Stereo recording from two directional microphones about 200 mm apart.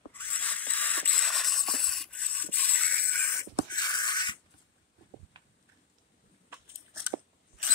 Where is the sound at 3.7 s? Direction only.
20° left (ahead or behind).